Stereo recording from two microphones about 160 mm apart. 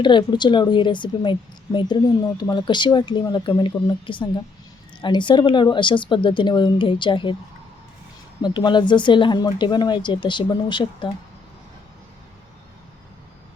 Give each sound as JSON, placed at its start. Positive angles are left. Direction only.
{"t": 0.0, "sound": "a woman's voice", "side_deg": 30}
{"t": 8.4, "sound": "a woman's voice", "side_deg": 30}